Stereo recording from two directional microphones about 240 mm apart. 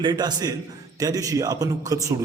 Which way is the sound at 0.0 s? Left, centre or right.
Centre.